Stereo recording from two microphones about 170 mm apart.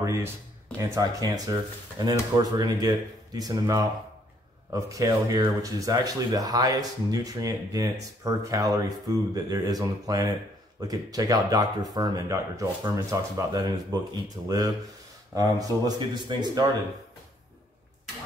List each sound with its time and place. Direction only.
0.0 s speech: 15° right (ahead or behind)